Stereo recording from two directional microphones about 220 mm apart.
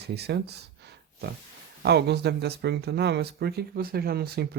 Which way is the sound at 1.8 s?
50° right (ahead or behind).